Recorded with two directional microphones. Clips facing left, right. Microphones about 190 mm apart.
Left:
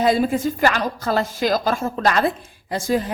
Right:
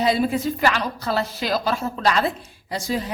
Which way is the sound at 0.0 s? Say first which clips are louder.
Left 2 dB; 50° left (ahead or behind).